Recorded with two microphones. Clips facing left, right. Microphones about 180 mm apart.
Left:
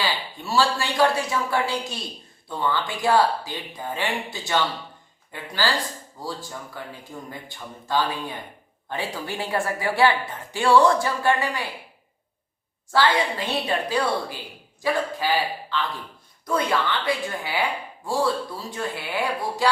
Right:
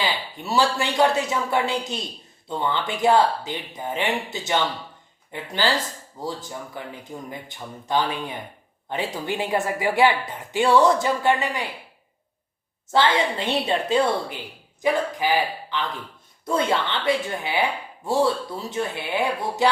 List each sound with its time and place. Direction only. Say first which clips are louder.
0.0 s speech: right 1 dB; 20° right (ahead or behind)
12.9 s a man's voice: right 1 dB; 20° right (ahead or behind)